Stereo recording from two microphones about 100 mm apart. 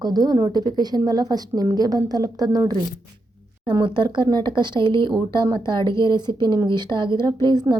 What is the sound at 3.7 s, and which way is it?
A woman's voice, 50° right (ahead or behind).